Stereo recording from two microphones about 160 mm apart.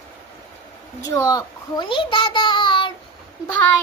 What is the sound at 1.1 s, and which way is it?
A child's voice, 20° left (ahead or behind).